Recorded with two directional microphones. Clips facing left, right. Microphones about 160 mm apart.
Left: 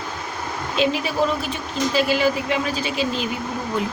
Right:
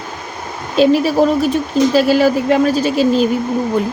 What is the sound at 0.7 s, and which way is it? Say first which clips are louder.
Speech: right 10 dB; 40° right (ahead or behind).